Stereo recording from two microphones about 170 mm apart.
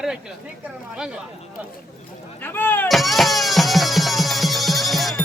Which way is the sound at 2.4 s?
10° left (ahead or behind).